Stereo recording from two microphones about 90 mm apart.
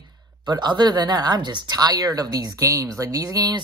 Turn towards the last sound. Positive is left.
turn(degrees=-45)  # may be behind; listen again after turning